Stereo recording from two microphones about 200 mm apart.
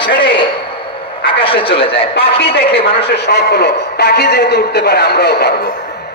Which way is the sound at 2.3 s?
55° left (ahead or behind).